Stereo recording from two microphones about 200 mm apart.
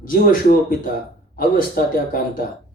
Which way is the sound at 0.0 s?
45° left (ahead or behind).